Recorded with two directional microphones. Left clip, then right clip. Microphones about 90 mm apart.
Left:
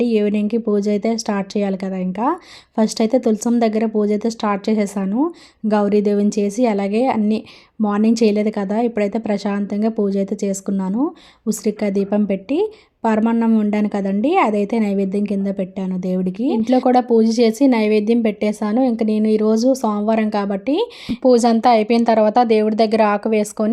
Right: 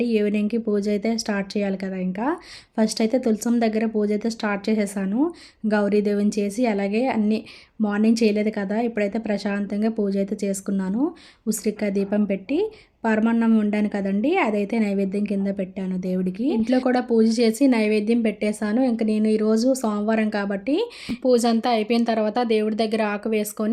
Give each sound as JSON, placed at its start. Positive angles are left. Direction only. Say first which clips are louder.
{"t": 0.0, "sound": "a woman's voice", "louder": "left 4 dB", "side_deg": 35}
{"t": 5.0, "sound": "a woman's voice", "louder": "left 2 dB", "side_deg": 15}
{"t": 5.6, "sound": "a woman's voice", "louder": "left 4 dB", "side_deg": 35}
{"t": 13.7, "sound": "a woman's voice", "louder": "left 4 dB", "side_deg": 35}